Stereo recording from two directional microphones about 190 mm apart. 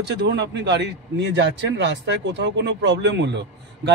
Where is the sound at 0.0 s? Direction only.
65° right (ahead or behind).